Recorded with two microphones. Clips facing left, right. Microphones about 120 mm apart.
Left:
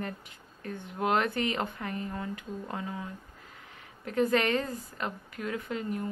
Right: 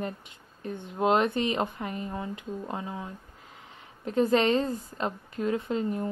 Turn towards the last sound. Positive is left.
turn(degrees=-25)  # may be behind; listen again after turning